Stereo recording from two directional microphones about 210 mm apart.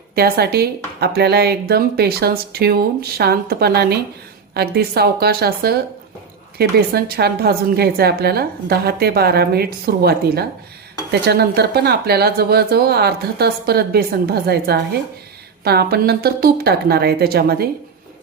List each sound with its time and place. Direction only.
0.2 s speech: 50° right (ahead or behind)